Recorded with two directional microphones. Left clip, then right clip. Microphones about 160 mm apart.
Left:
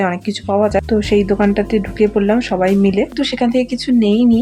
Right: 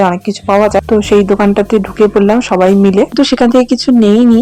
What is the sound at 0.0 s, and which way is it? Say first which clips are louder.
Speech: right 7 dB; 25° right (ahead or behind).